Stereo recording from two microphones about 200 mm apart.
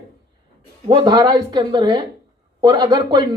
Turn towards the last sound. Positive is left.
turn(degrees=-20)  # may be behind; listen again after turning